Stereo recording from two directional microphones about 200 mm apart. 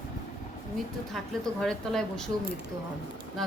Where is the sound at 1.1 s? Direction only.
5° left (ahead or behind).